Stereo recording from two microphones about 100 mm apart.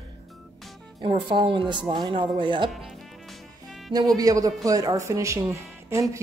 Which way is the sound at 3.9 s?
40° right (ahead or behind).